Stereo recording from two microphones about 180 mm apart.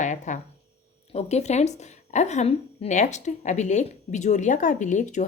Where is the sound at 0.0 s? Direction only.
40° left (ahead or behind).